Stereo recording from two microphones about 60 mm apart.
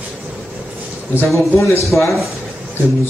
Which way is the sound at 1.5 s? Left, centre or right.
Left.